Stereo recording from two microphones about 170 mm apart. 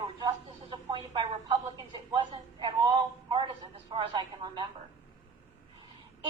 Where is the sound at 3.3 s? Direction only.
30° right (ahead or behind).